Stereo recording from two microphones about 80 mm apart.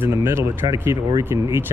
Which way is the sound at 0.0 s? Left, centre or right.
Right.